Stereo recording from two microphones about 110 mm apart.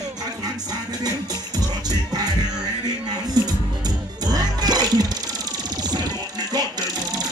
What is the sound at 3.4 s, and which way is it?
Music, 35° right (ahead or behind).